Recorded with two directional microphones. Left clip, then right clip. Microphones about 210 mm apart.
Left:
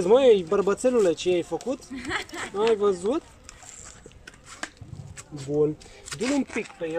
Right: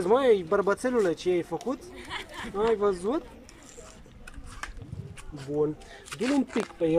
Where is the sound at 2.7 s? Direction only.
Centre (ahead or behind).